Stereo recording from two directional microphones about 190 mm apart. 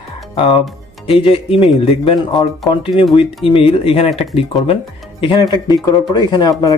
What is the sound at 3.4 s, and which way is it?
Speech, 30° left (ahead or behind).